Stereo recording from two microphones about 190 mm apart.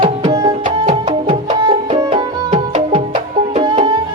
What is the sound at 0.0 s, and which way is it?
Music, 25° right (ahead or behind).